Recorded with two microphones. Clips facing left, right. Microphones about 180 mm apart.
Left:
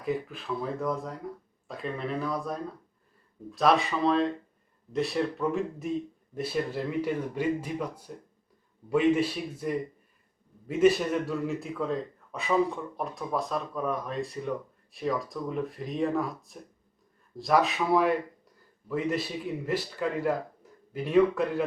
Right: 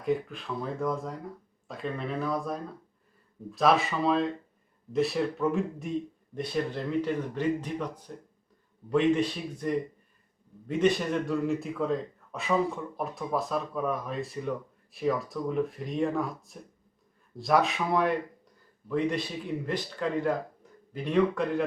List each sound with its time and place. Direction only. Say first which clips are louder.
0.0 s a man's voice: right 2 dB; centre (ahead or behind)